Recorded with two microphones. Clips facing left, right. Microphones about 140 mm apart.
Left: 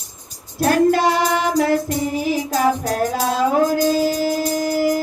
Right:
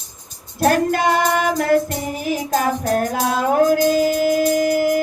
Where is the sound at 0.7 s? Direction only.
50° right (ahead or behind).